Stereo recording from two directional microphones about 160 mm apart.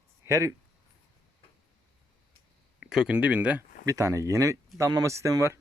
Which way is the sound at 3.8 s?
20° right (ahead or behind).